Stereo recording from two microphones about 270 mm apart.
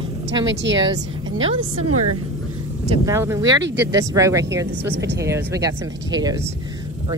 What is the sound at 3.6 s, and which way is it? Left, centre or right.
Speech, right.